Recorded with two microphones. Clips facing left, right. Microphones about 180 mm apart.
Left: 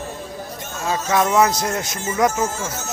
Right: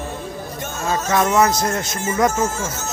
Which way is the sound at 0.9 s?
10° left (ahead or behind).